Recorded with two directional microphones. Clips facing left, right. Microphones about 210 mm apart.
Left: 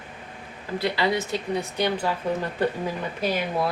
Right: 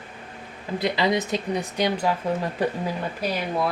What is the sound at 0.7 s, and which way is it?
Speech, 20° right (ahead or behind).